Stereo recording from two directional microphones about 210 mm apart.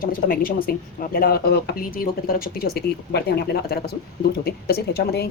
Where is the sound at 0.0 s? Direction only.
45° left (ahead or behind).